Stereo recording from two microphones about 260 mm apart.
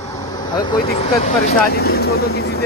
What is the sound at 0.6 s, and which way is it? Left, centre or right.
Speech, centre.